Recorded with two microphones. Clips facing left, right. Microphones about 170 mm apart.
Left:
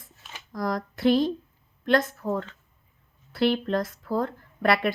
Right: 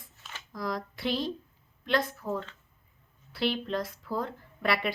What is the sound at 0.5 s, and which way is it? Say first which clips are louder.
A woman's voice: left 5 dB; 45° left (ahead or behind).